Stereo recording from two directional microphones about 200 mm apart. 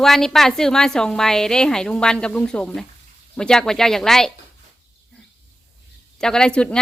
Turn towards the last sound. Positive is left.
turn(degrees=5)  # may be behind; listen again after turning